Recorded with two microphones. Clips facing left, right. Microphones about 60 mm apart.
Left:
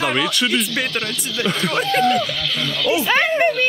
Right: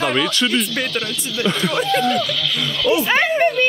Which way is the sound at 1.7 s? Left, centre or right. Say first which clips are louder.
Left 2 dB; left.